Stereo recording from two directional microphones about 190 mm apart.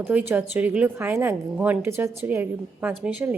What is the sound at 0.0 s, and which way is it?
A woman's voice, 5° right (ahead or behind).